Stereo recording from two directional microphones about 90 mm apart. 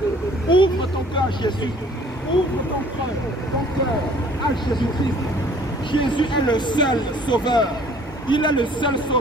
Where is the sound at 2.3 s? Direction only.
55° left (ahead or behind).